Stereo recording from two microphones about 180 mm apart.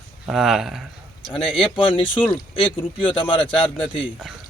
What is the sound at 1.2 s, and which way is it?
Speech, 30° left (ahead or behind).